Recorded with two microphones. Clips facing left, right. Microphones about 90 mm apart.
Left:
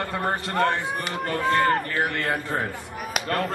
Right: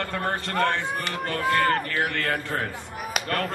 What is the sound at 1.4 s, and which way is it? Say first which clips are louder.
Speech: left 1 dB; 20° left (ahead or behind).